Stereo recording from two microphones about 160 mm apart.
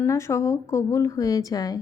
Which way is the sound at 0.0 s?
20° left (ahead or behind).